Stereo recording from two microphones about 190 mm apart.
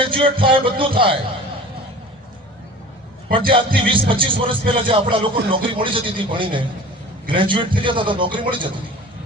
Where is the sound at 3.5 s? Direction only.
25° right (ahead or behind).